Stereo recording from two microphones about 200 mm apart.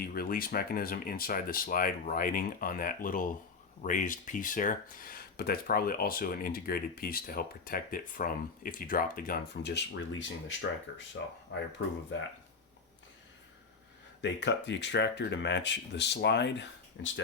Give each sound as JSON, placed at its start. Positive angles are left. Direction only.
{"t": 0.0, "sound": "speech", "side_deg": 45}
{"t": 14.2, "sound": "speech", "side_deg": 60}